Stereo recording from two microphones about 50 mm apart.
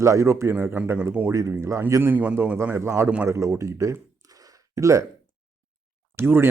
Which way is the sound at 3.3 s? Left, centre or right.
Right.